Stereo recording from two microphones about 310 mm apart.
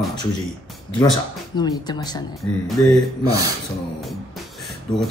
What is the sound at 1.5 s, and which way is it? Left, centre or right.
Speech, centre.